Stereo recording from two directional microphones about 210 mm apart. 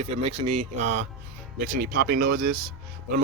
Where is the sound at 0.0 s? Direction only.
30° right (ahead or behind).